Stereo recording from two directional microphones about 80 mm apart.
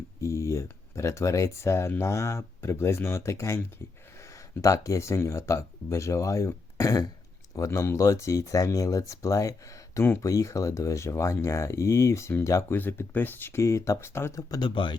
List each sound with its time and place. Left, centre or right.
0.2 s speech: left
12.7 s speech: left
14.5 s speech: left